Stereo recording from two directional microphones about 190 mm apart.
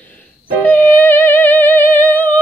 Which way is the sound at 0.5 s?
10° left (ahead or behind).